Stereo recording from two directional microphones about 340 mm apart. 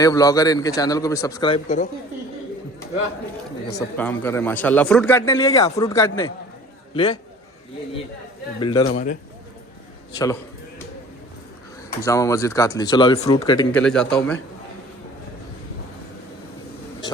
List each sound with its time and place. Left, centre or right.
0.0 s a man's voice: centre
3.7 s a man's voice: centre
6.9 s a man's voice: centre
8.6 s a man's voice: centre
11.9 s a man's voice: centre